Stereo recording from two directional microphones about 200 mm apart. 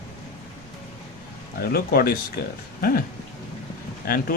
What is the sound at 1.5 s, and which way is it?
Speech, 50° left (ahead or behind).